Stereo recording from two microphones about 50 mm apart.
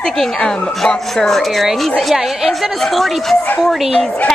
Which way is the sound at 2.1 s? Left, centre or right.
Centre.